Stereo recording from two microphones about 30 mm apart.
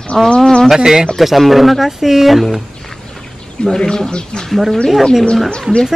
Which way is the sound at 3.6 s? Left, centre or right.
Centre.